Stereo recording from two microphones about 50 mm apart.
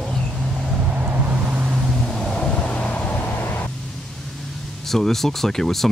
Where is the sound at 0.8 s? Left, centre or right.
Right.